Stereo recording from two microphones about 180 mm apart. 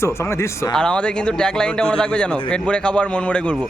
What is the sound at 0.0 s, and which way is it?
Speech, 15° left (ahead or behind).